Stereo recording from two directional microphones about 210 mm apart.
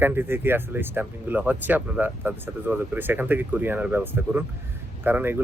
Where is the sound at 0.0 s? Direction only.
10° right (ahead or behind).